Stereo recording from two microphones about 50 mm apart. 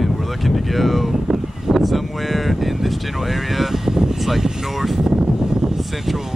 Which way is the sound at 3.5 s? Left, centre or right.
Centre.